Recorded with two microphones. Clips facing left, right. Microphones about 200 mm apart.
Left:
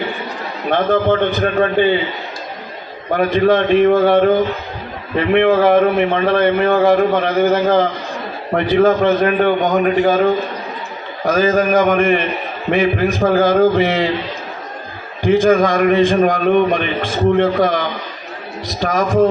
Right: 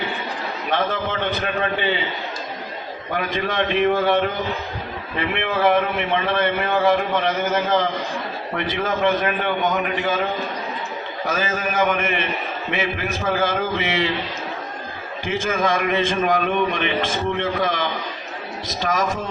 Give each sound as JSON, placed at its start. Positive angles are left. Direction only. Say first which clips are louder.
{"t": 0.7, "sound": "a man's voice", "louder": "left 9 dB", "side_deg": 50}
{"t": 3.2, "sound": "a man's voice", "louder": "left 10 dB", "side_deg": 50}
{"t": 11.3, "sound": "a man's voice", "louder": "left 11 dB", "side_deg": 50}
{"t": 15.4, "sound": "a man's voice", "louder": "left 6 dB", "side_deg": 50}
{"t": 18.9, "sound": "a man's voice", "louder": "left 11 dB", "side_deg": 50}